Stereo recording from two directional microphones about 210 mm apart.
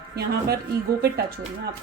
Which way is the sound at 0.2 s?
50° right (ahead or behind).